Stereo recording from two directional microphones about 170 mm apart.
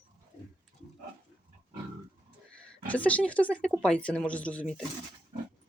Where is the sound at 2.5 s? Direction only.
10° left (ahead or behind).